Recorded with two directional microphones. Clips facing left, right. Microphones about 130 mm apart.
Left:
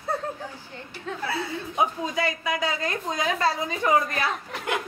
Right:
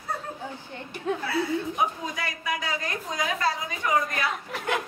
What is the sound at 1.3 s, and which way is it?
A woman's voice, 25° left (ahead or behind).